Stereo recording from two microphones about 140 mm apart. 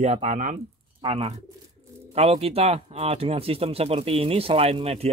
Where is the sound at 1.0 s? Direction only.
45° right (ahead or behind).